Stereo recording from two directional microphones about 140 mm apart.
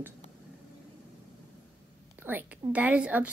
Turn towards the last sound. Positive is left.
turn(degrees=-10)  # may be behind; listen again after turning